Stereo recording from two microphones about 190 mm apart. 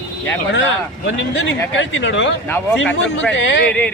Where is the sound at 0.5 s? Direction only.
70° left (ahead or behind).